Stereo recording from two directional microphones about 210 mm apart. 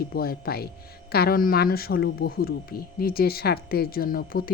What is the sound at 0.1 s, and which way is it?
Speech, 45° left (ahead or behind).